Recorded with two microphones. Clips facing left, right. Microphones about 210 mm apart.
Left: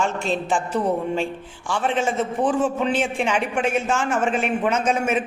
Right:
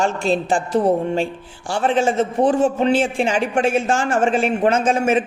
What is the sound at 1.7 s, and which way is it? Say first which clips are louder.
Speech: right 4 dB; 30° right (ahead or behind).